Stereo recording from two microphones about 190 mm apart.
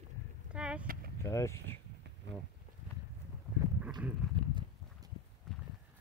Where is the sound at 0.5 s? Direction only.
5° right (ahead or behind).